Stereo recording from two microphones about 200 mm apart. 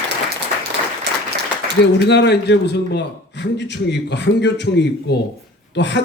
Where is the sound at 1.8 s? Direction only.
60° left (ahead or behind).